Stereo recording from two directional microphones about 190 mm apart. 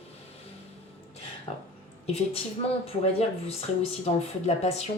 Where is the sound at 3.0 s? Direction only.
30° left (ahead or behind).